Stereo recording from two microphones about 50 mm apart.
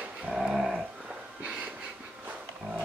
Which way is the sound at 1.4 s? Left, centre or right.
Centre.